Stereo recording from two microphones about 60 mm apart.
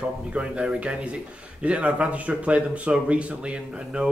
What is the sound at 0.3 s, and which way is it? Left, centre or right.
Speech, centre.